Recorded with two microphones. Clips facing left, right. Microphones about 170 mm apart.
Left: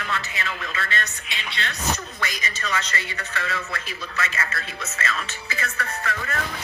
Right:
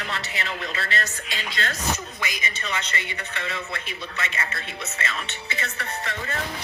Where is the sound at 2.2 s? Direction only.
15° right (ahead or behind).